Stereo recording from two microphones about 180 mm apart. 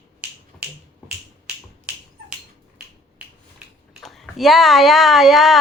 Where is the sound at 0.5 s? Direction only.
5° left (ahead or behind).